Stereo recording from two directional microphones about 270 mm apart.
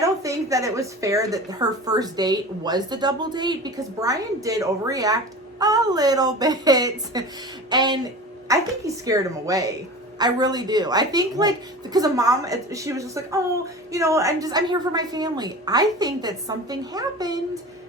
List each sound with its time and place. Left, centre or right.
0.0 s a woman's voice: centre